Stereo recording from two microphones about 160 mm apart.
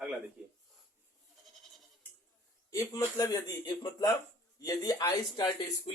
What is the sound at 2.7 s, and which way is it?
Speech, 20° left (ahead or behind).